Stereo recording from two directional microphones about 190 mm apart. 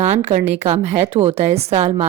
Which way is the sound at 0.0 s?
35° right (ahead or behind).